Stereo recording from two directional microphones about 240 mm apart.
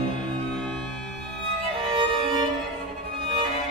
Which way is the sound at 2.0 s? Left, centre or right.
Right.